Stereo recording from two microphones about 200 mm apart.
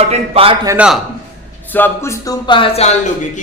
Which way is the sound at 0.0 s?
30° right (ahead or behind).